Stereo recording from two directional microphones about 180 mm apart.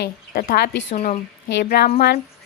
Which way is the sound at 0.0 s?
55° left (ahead or behind).